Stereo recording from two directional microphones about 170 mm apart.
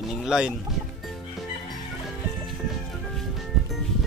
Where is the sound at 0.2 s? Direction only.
5° right (ahead or behind).